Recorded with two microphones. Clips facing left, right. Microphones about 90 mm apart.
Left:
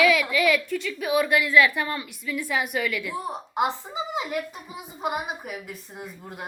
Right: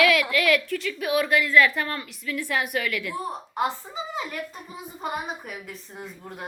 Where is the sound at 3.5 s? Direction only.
15° left (ahead or behind).